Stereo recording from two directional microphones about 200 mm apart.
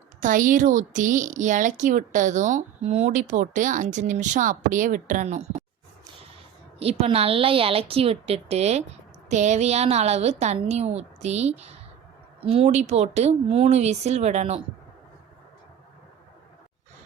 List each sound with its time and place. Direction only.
0.2 s a woman's voice: 40° right (ahead or behind)
7.0 s a woman's voice: 30° right (ahead or behind)